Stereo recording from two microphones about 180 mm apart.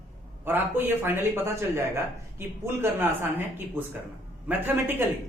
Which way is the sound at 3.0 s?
10° right (ahead or behind).